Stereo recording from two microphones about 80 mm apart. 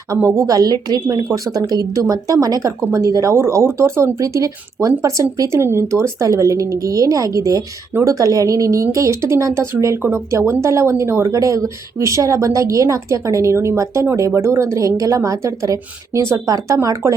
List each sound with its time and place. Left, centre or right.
0.2 s speech: right
0.4 s speech: right